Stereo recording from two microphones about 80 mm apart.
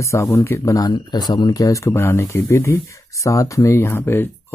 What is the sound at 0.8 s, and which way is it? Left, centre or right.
Speech, left.